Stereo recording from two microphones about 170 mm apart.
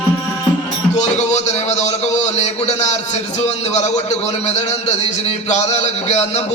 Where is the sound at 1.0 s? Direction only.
40° left (ahead or behind).